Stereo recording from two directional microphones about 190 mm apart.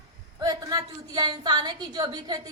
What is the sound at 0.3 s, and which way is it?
A woman's voice, 20° right (ahead or behind).